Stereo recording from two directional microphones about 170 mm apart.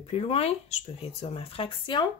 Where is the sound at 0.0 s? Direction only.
35° left (ahead or behind).